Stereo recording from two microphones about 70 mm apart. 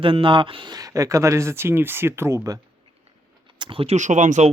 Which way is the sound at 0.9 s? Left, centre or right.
Right.